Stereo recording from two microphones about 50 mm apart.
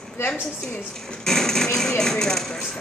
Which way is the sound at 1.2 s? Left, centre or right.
Centre.